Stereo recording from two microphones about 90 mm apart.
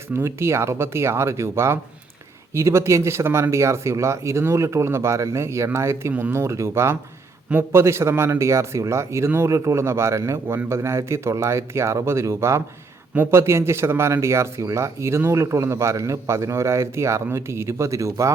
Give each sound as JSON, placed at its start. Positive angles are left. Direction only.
{"t": 0.1, "sound": "speech", "side_deg": -30}